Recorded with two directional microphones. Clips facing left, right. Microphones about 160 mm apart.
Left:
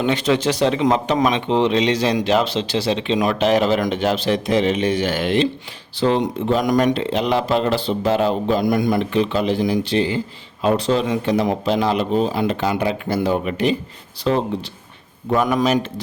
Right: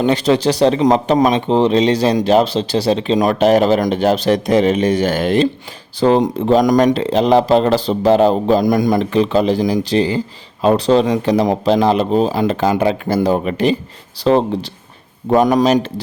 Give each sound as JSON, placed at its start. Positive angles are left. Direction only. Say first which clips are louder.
{"t": 0.0, "sound": "speech", "louder": "right 4 dB", "side_deg": -35}